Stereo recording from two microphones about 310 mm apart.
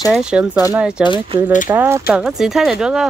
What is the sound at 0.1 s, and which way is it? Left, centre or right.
Speech, centre.